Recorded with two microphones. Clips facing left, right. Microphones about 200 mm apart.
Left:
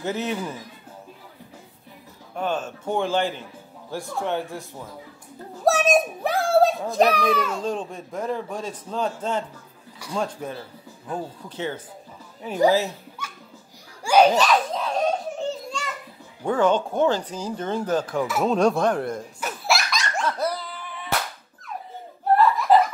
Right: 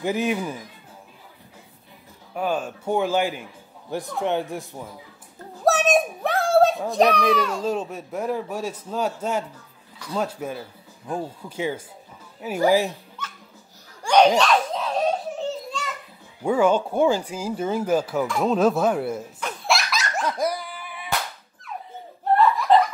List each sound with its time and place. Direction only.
0.0 s a child's voice: 10° right (ahead or behind)
2.3 s a child's voice: 10° right (ahead or behind)
5.7 s a sound: centre (ahead or behind)
6.9 s a child's voice: centre (ahead or behind)
13.2 s a sound: 10° left (ahead or behind)
14.0 s giggle: 5° left (ahead or behind)
16.4 s a child's voice: 10° right (ahead or behind)
18.2 s speech: centre (ahead or behind)
19.4 s laughter: centre (ahead or behind)
22.3 s laughter: centre (ahead or behind)